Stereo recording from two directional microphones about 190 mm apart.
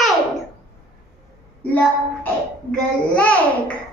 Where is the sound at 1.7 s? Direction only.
10° left (ahead or behind).